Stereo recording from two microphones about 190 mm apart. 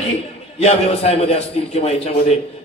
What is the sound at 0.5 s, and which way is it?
Speech, 30° left (ahead or behind).